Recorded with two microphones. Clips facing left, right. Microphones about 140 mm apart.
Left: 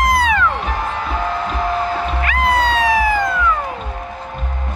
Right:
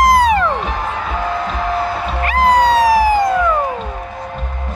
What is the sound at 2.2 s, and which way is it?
Music, 40° right (ahead or behind).